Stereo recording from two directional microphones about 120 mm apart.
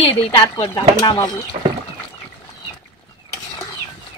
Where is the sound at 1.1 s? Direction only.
35° left (ahead or behind).